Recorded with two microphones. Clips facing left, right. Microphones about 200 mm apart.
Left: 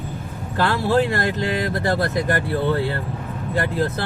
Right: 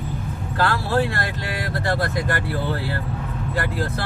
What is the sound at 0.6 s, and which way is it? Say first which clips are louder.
Speech: left 3 dB; 20° left (ahead or behind).